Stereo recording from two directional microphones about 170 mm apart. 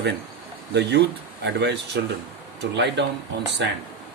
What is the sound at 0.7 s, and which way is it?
Speech, 90° right.